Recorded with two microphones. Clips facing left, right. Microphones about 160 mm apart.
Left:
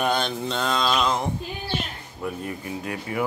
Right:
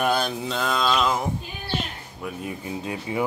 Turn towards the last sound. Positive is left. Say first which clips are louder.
# right 1 dB
turn(degrees=-20)  # may be behind; listen again after turning